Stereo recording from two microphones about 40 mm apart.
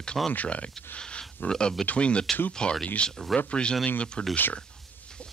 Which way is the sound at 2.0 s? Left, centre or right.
Left.